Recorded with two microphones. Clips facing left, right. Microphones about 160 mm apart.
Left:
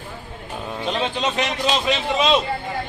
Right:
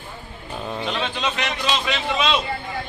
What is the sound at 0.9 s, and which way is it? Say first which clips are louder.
A man's voice: left 4 dB; 35° left (ahead or behind).